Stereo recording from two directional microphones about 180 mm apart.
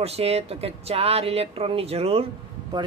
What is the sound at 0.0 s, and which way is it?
Speech, 35° right (ahead or behind).